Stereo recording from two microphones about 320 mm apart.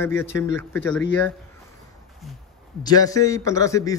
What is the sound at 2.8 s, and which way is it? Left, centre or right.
A man's voice, centre.